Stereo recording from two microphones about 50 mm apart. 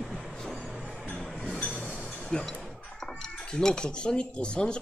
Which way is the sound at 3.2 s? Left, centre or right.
Centre.